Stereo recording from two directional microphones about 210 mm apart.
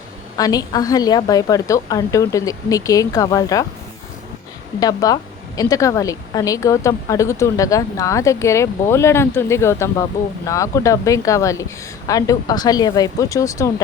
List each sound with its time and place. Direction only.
0.3 s a woman's voice: 20° left (ahead or behind)
4.8 s a woman's voice: 15° left (ahead or behind)